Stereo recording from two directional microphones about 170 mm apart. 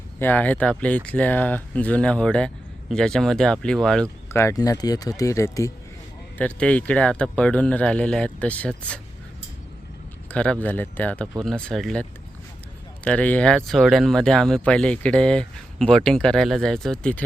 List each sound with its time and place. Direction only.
0.2 s speech: 10° left (ahead or behind)
4.3 s speech: 15° left (ahead or behind)
6.3 s speech: 10° left (ahead or behind)
10.3 s speech: 5° left (ahead or behind)
13.1 s speech: 10° left (ahead or behind)